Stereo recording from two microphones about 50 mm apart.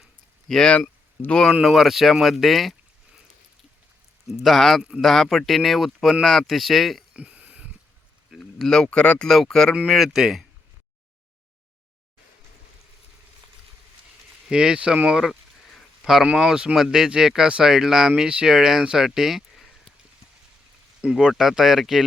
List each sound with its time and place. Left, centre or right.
0.4 s speech: centre
1.6 s speech: centre
4.3 s speech: centre
7.2 s a sound: right
8.4 s speech: centre
9.8 s speech: centre
14.4 s speech: centre
16.3 s speech: centre
21.0 s speech: centre